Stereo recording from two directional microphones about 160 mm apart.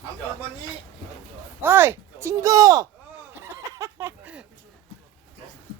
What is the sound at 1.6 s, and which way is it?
Speech, 15° right (ahead or behind).